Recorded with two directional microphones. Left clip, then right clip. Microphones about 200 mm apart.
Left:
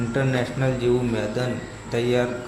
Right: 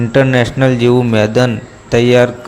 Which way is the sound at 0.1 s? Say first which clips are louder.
Right 14 dB; 40° right (ahead or behind).